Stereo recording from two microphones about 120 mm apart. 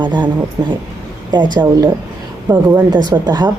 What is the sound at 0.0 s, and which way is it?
Speech, 40° right (ahead or behind).